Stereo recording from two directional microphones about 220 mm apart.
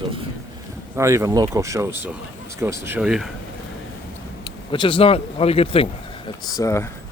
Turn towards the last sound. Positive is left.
turn(degrees=15)  # may be behind; listen again after turning